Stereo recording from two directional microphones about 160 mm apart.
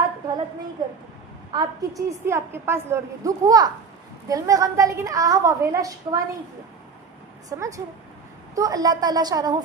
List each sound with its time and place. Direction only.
1.5 s a woman's voice: 20° right (ahead or behind)
7.5 s a woman's voice: 20° right (ahead or behind)